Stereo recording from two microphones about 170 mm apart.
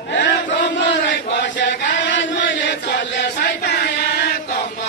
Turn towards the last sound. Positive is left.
turn(degrees=75)  # may be behind; listen again after turning